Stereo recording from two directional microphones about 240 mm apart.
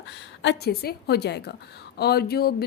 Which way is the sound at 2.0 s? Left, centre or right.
Left.